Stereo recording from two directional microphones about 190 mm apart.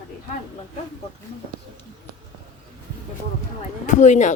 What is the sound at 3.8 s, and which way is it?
Speech, 40° left (ahead or behind).